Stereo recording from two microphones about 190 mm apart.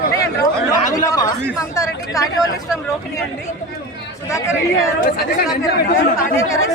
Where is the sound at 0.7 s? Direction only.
20° left (ahead or behind).